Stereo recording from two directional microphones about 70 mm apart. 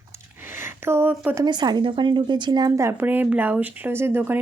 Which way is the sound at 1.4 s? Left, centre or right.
Right.